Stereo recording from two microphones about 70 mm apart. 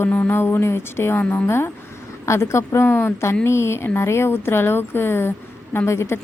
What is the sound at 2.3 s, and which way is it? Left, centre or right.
A woman's voice, left.